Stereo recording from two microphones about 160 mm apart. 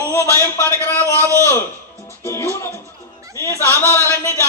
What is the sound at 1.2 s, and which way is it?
Speech, 20° right (ahead or behind).